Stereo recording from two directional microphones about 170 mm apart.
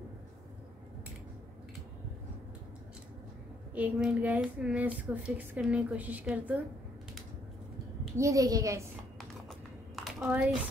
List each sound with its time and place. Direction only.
3.7 s speech: 5° right (ahead or behind)
8.2 s a woman's voice: 20° right (ahead or behind)
9.2 s a sound: centre (ahead or behind)
10.2 s speech: 10° right (ahead or behind)